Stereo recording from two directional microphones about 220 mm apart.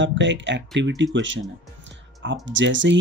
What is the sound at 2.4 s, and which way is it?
Speech, 55° right (ahead or behind).